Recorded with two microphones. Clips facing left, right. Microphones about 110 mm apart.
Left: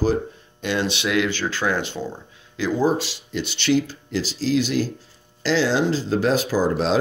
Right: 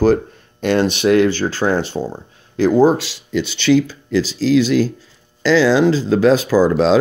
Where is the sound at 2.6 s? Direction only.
60° right (ahead or behind); by 3.1 s 85° right.